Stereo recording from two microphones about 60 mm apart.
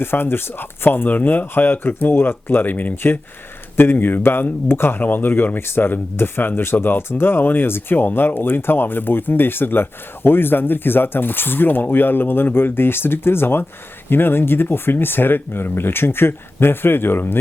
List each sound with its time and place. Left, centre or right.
0.0 s speech: left